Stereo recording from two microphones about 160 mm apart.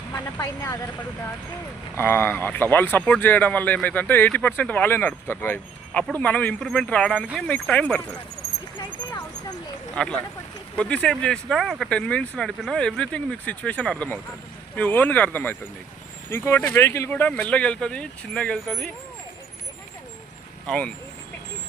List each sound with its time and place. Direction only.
0.1 s speech: 20° left (ahead or behind)
2.0 s speech: 15° left (ahead or behind)
9.9 s speech: 5° left (ahead or behind)
20.7 s speech: 5° left (ahead or behind)